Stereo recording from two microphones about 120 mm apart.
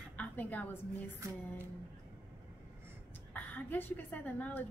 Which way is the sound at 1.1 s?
25° right (ahead or behind).